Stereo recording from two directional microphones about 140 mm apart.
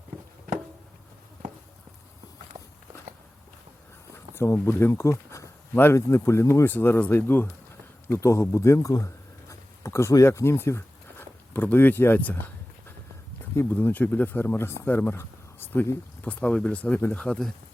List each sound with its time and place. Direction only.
2.5 s walk: 25° right (ahead or behind)
4.4 s speech: 15° left (ahead or behind)
13.6 s speech: 15° left (ahead or behind)